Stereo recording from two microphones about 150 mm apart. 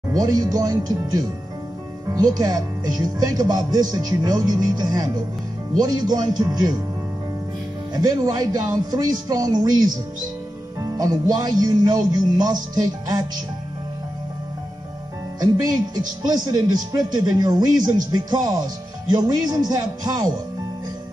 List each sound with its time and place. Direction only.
0.1 s speech: 25° right (ahead or behind)
7.9 s speech: 25° right (ahead or behind)
15.4 s speech: 25° right (ahead or behind)